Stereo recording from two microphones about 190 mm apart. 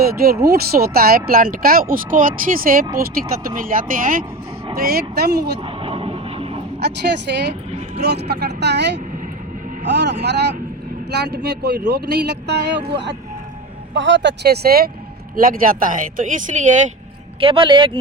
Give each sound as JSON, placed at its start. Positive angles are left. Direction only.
{"t": 0.5, "sound": "speech", "side_deg": -55}
{"t": 5.6, "sound": "vehicle", "side_deg": -30}
{"t": 6.7, "sound": "speech", "side_deg": -60}
{"t": 17.4, "sound": "speech", "side_deg": -25}